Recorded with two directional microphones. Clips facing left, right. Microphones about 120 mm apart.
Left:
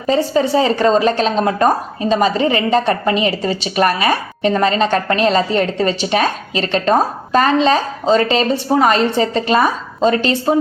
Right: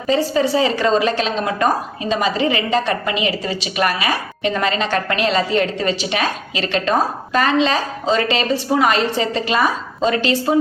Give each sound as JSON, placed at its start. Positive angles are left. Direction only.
{"t": 0.5, "sound": "a woman's voice", "side_deg": 35}